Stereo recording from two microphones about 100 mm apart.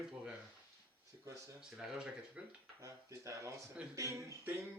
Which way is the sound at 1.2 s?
30° right (ahead or behind).